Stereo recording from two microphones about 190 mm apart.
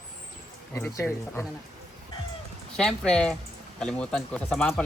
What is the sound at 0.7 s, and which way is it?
Speech, 15° left (ahead or behind).